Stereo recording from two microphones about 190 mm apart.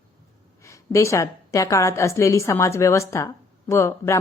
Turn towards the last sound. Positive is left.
turn(degrees=15)  # may be behind; listen again after turning